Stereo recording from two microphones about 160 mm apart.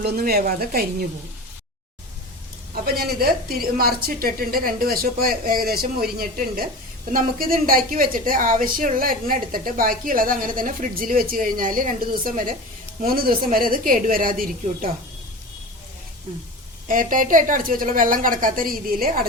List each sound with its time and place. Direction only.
0.0 s a woman's voice: 75° right (ahead or behind)
2.8 s a woman's voice: 70° right (ahead or behind)
13.0 s a woman's voice: 65° right (ahead or behind)
16.9 s a woman's voice: 55° right (ahead or behind)